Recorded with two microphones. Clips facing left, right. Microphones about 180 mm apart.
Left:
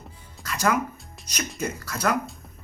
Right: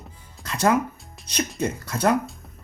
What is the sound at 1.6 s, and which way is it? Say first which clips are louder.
Speech: right 3 dB; 25° right (ahead or behind).